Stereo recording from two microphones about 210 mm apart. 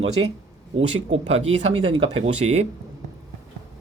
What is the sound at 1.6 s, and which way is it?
Speech, 25° right (ahead or behind).